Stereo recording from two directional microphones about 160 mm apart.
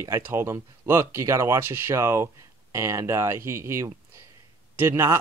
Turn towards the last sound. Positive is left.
turn(degrees=-15)  # may be behind; listen again after turning